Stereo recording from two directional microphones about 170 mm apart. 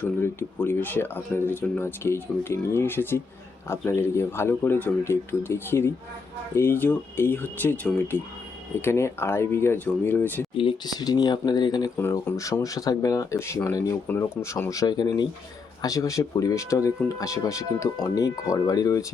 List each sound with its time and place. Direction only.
0.0 s speech: 10° left (ahead or behind)
10.6 s speech: 25° left (ahead or behind)